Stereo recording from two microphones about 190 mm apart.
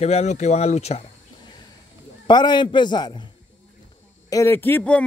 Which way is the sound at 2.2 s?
25° left (ahead or behind).